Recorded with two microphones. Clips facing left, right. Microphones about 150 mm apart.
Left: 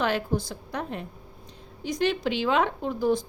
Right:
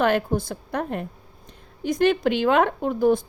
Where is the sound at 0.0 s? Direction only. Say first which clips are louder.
Right 5 dB; 55° right (ahead or behind).